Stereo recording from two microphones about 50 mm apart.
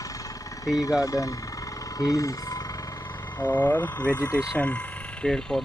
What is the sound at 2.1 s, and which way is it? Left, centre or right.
Speech, left.